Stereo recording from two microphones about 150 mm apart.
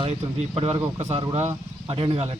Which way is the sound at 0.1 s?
45° right (ahead or behind).